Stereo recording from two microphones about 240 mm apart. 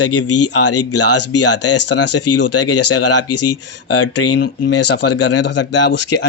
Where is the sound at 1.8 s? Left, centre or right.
Left.